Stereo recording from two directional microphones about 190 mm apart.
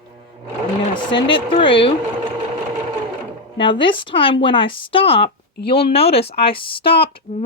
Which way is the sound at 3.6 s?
25° left (ahead or behind).